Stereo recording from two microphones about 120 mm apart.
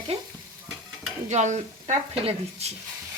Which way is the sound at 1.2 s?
75° right (ahead or behind).